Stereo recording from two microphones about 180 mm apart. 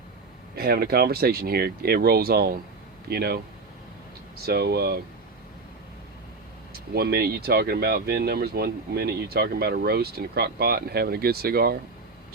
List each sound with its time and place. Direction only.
0.5 s speech: 60° right (ahead or behind)
4.4 s speech: 60° right (ahead or behind)
6.9 s speech: 60° right (ahead or behind)